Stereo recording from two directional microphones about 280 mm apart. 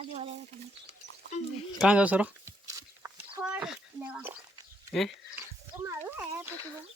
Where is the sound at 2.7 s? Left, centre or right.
Centre.